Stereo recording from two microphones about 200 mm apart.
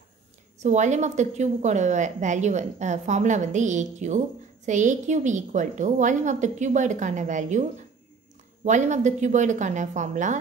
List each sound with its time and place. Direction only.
0.6 s a woman's voice: 35° right (ahead or behind)
8.6 s a woman's voice: 35° right (ahead or behind)